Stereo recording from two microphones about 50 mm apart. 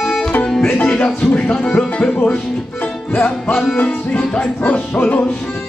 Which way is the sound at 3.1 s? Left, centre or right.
Left.